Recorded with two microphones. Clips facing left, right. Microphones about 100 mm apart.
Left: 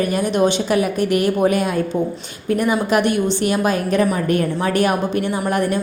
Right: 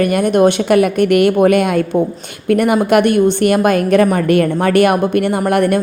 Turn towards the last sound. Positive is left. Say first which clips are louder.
# right 6 dB
turn(degrees=-65)  # may be behind; listen again after turning